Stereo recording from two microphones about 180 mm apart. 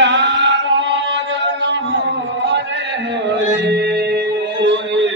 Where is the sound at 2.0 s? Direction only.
75° right (ahead or behind).